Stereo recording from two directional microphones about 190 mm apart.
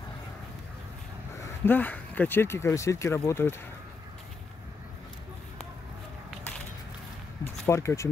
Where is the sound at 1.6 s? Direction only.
10° left (ahead or behind).